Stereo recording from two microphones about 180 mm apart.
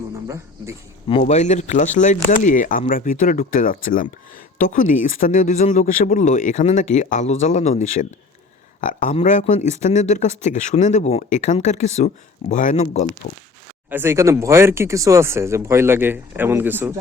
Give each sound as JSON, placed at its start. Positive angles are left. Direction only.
{"t": 0.3, "sound": "speech", "side_deg": -15}
{"t": 1.2, "sound": "speech", "side_deg": 40}
{"t": 13.9, "sound": "speech", "side_deg": -15}